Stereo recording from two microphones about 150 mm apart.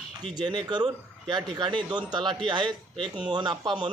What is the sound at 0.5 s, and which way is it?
Speech, 30° right (ahead or behind).